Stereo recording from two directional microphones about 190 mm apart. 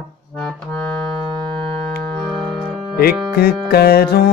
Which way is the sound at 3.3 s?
55° left (ahead or behind).